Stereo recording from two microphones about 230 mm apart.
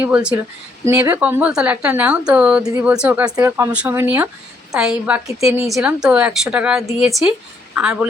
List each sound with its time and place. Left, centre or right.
0.0 s a woman's voice: centre